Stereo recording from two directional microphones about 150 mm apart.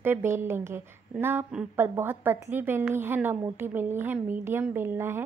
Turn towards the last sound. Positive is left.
turn(degrees=-15)  # may be behind; listen again after turning